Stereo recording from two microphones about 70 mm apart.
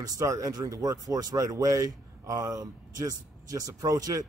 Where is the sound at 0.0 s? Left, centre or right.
Right.